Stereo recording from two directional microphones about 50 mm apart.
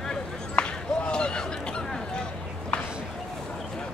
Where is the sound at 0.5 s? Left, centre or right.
Left.